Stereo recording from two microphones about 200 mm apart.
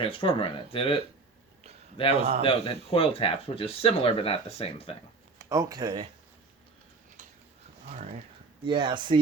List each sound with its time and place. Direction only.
0.0 s speech: 25° left (ahead or behind)
2.0 s speech: 30° left (ahead or behind)
5.4 s speech: 15° right (ahead or behind)
8.6 s speech: 25° right (ahead or behind)